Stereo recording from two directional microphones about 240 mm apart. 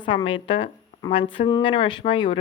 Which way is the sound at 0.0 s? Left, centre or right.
Centre.